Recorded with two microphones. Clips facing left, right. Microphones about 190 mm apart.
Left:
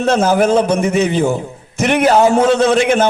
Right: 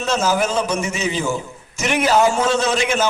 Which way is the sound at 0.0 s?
60° left (ahead or behind).